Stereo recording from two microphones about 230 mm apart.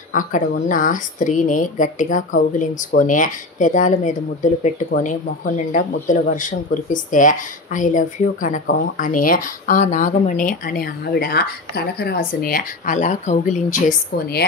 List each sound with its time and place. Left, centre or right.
0.1 s speech: left